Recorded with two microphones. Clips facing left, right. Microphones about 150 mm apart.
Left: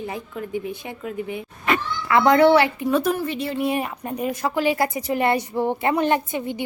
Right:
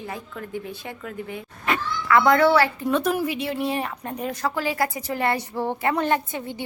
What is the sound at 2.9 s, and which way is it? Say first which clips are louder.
Speech: left 1 dB; centre (ahead or behind).